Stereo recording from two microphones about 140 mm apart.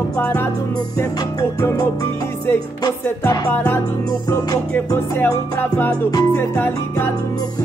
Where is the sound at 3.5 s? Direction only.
10° left (ahead or behind).